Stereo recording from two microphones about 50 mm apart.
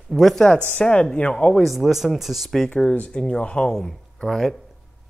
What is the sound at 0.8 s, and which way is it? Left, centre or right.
Speech, left.